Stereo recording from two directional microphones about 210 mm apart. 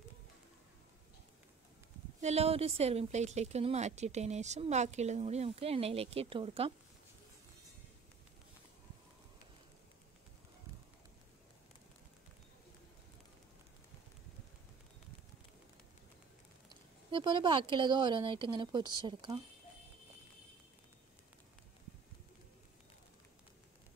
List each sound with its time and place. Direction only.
2.2 s a woman's voice: 30° right (ahead or behind)
17.1 s speech: 20° right (ahead or behind)